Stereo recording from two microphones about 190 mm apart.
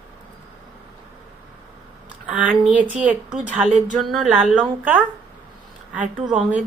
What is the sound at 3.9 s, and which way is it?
A woman's voice, 5° right (ahead or behind).